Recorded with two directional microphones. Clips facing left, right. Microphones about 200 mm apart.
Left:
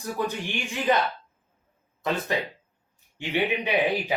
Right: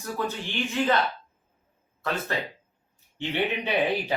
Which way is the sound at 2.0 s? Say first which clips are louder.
Left 3 dB; 15° left (ahead or behind).